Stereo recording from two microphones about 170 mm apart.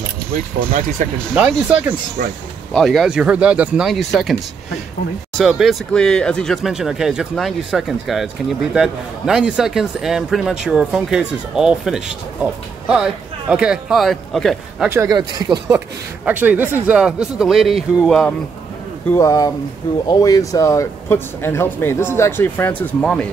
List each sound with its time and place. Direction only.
1.0 s speech: 50° right (ahead or behind)
1.3 s speech: 10° right (ahead or behind)
5.4 s speech: centre (ahead or behind)
14.9 s speech: 20° right (ahead or behind)
16.3 s speech: 10° right (ahead or behind)
19.0 s speech: 20° left (ahead or behind)